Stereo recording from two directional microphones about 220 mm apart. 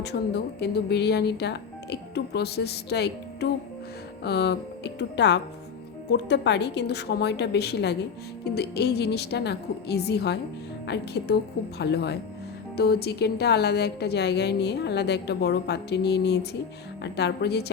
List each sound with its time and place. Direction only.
0.0 s a woman's voice: 50° left (ahead or behind)